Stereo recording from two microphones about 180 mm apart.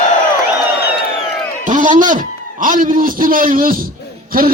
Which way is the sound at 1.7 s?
45° right (ahead or behind).